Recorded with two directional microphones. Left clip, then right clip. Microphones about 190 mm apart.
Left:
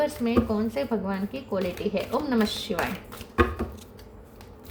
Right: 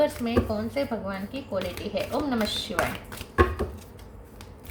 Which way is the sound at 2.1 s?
40° left (ahead or behind).